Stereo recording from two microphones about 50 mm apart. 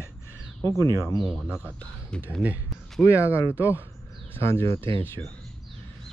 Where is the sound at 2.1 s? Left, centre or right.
Centre.